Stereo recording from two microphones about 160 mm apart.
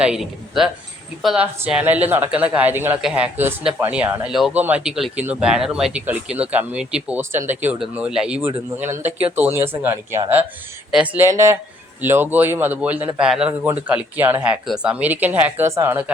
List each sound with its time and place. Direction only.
0.0 s speech: 5° right (ahead or behind)